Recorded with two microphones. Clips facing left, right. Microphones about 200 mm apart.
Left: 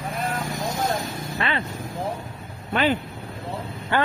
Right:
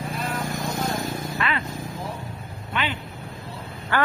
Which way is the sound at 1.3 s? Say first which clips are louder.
Left 3 dB; 30° left (ahead or behind).